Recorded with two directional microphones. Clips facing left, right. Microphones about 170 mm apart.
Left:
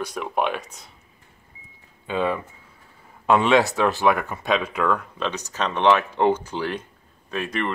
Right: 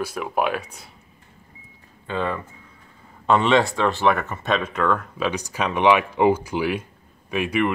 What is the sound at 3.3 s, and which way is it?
Speech, 5° left (ahead or behind).